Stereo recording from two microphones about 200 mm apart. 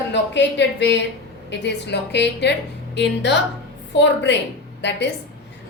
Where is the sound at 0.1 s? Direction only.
60° left (ahead or behind).